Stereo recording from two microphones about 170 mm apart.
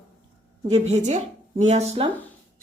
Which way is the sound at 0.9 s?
45° right (ahead or behind).